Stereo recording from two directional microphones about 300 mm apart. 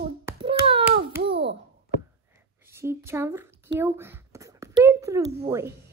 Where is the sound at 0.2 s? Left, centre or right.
Centre.